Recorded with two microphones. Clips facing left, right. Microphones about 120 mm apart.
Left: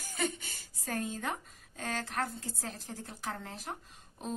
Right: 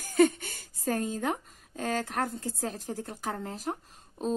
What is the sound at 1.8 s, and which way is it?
A woman's voice, 45° right (ahead or behind).